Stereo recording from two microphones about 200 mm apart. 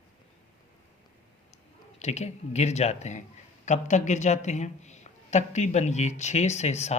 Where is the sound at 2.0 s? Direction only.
35° left (ahead or behind).